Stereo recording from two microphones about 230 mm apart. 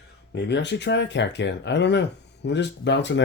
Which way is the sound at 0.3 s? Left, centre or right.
Left.